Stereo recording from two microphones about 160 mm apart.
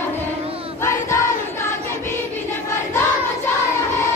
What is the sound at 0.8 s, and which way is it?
Child singing, 15° left (ahead or behind).